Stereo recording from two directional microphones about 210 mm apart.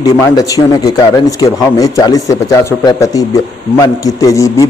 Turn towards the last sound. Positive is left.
turn(degrees=15)  # may be behind; listen again after turning